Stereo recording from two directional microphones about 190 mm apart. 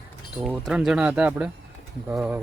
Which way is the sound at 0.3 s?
5° right (ahead or behind).